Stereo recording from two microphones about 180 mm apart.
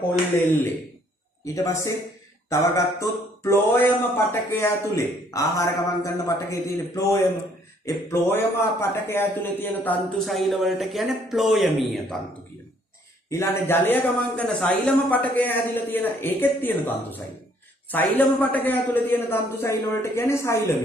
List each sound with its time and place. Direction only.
1.4 s a man's voice: 15° left (ahead or behind); by 12.2 s centre (ahead or behind)
13.3 s speech: 15° left (ahead or behind)